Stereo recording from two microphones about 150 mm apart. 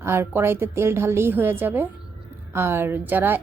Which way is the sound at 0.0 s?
15° right (ahead or behind).